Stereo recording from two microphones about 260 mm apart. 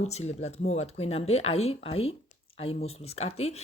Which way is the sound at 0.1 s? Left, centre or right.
Left.